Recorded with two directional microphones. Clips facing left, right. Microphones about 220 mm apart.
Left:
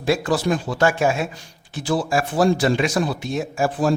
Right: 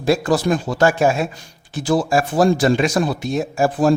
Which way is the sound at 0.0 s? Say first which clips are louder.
Right 3 dB; 40° right (ahead or behind).